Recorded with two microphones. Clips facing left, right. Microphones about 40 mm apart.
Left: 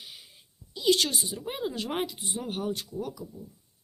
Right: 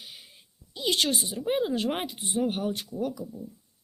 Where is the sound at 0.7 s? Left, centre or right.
Right.